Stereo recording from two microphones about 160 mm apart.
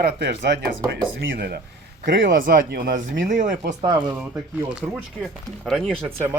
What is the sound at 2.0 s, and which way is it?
Speech, 75° right (ahead or behind).